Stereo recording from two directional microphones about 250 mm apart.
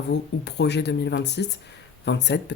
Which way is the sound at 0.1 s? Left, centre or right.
Left.